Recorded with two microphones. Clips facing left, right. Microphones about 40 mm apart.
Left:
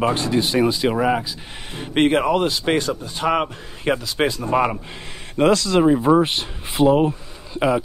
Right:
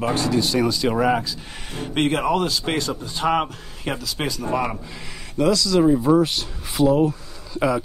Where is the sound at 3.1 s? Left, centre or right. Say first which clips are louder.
Even; centre.